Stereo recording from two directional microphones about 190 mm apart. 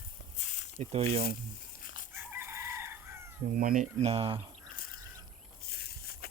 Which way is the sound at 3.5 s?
45° right (ahead or behind).